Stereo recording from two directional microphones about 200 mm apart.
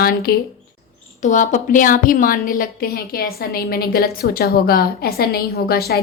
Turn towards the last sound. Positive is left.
turn(degrees=50)  # may be behind; listen again after turning